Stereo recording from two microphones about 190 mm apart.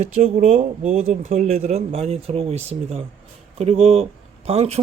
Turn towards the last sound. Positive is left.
turn(degrees=-35)  # may be behind; listen again after turning